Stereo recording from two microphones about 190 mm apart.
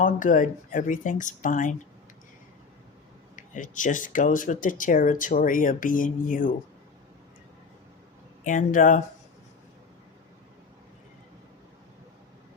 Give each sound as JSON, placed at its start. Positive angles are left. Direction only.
{"t": 0.0, "sound": "speech", "side_deg": 45}
{"t": 3.3, "sound": "speech", "side_deg": 45}
{"t": 8.4, "sound": "speech", "side_deg": 45}